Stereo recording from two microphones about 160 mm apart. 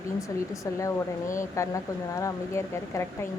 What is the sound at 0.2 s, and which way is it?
Speech, 20° left (ahead or behind).